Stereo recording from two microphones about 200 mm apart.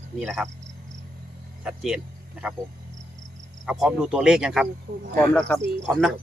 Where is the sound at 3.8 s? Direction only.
5° right (ahead or behind).